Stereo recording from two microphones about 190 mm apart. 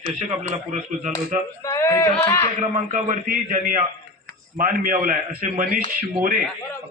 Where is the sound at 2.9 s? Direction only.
45° right (ahead or behind).